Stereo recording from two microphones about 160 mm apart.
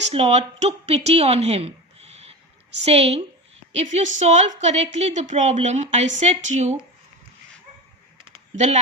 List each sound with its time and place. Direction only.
0.1 s a woman's voice: 40° right (ahead or behind)
8.5 s a woman's voice: 45° right (ahead or behind)